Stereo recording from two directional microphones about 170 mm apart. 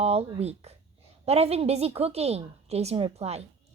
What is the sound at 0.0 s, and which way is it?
A woman's voice, 35° right (ahead or behind).